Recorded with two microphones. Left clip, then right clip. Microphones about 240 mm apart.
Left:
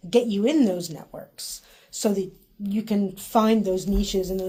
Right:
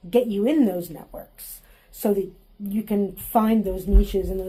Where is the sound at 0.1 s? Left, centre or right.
Left.